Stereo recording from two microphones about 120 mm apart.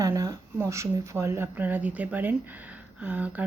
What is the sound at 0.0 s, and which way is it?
Speech, 30° right (ahead or behind).